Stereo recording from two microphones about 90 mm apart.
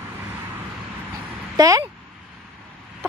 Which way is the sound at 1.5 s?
40° right (ahead or behind).